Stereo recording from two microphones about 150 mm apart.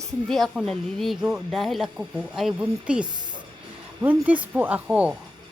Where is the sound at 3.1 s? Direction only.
30° right (ahead or behind).